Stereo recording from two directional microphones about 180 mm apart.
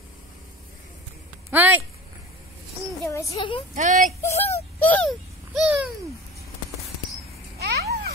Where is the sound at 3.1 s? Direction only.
15° left (ahead or behind).